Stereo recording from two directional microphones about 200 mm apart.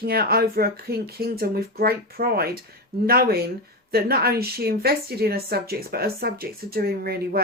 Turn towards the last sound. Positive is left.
turn(degrees=-50)  # may be behind; listen again after turning